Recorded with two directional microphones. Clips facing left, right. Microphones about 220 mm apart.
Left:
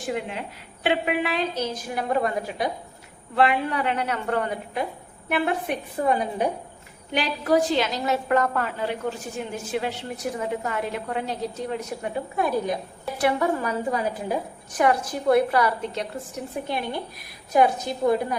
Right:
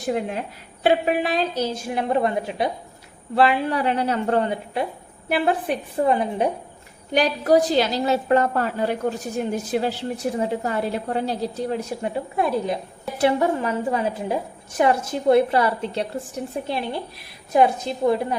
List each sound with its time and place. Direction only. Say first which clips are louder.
0.0 s a woman's voice: right 4 dB; 40° right (ahead or behind)
7.1 s a woman's voice: right 4 dB; 40° right (ahead or behind)